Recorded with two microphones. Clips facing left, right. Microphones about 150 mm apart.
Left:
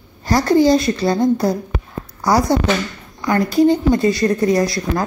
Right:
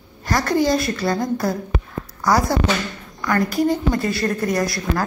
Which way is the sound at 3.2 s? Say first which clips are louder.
Left 5 dB; 25° left (ahead or behind).